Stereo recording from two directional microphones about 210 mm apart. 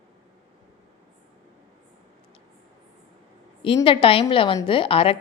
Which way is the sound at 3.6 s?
25° left (ahead or behind).